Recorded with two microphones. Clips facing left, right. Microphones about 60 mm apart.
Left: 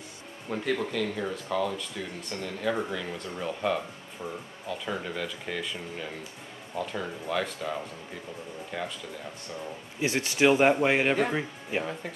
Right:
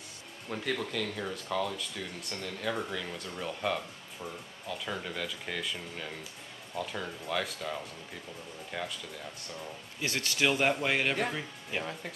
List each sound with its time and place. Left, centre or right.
0.5 s speech: centre
9.9 s speech: left
11.8 s speech: centre